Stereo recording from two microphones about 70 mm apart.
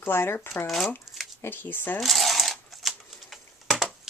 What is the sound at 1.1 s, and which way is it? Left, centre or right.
Shuffling cards, centre.